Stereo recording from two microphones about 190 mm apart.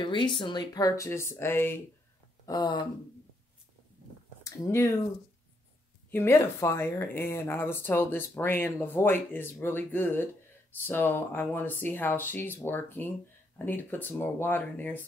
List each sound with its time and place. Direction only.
0.0 s speech: 25° left (ahead or behind)
2.4 s speech: 20° left (ahead or behind)
4.5 s speech: 15° left (ahead or behind)
6.1 s speech: 15° left (ahead or behind)